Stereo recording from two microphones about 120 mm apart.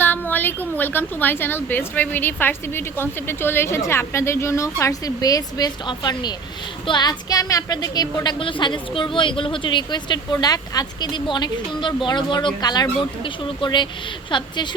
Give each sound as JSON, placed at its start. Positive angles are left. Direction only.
{"t": 0.0, "sound": "a woman's voice", "side_deg": 15}